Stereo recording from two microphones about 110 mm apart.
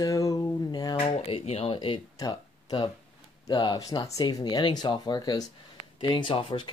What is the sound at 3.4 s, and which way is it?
Speech, 45° left (ahead or behind).